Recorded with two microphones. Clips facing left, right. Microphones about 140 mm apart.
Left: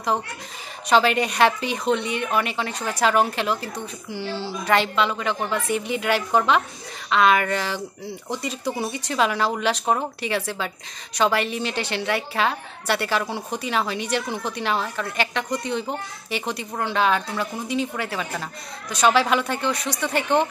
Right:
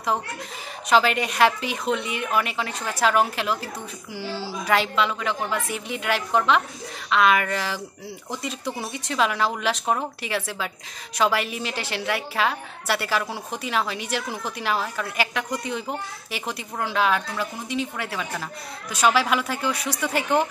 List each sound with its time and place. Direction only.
0.8 s a woman's voice: centre (ahead or behind)